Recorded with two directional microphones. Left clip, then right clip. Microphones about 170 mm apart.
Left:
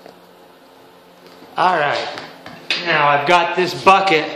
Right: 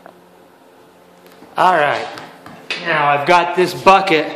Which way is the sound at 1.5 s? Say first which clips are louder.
Right 3 dB; 45° right (ahead or behind).